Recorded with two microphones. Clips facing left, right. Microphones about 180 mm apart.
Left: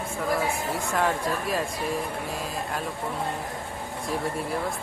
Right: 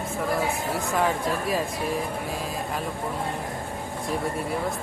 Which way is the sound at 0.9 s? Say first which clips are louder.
Right 1 dB; centre (ahead or behind).